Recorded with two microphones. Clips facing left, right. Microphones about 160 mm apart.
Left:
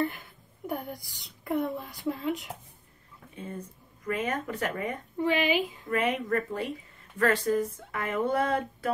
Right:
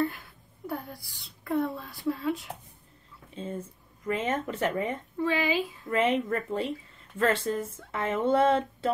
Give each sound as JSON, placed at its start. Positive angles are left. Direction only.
{"t": 0.7, "sound": "speech", "side_deg": 20}
{"t": 3.3, "sound": "speech", "side_deg": -25}
{"t": 5.2, "sound": "speech", "side_deg": 20}
{"t": 5.9, "sound": "speech", "side_deg": -25}